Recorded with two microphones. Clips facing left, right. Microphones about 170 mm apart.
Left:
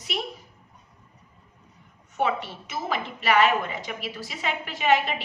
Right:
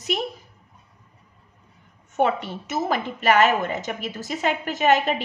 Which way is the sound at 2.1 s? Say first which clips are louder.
Right 4 dB; 45° right (ahead or behind).